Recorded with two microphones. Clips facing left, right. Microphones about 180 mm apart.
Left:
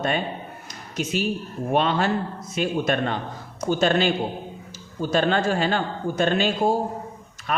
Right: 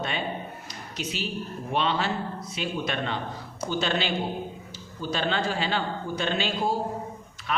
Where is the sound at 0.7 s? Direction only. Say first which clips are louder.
Left 9 dB; 50° left (ahead or behind).